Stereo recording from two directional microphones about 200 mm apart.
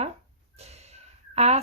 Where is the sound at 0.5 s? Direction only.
30° right (ahead or behind).